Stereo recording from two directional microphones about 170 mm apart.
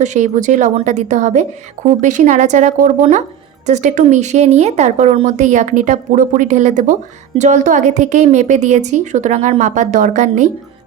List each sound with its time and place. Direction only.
0.0 s a woman's voice: 45° right (ahead or behind)